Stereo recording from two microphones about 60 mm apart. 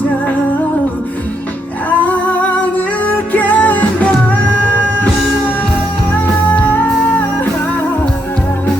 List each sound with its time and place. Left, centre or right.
1.9 s music: left
6.1 s music: left